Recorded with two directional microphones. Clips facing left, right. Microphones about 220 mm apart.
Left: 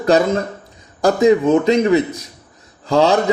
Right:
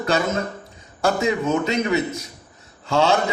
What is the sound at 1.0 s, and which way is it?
Speech, 35° left (ahead or behind).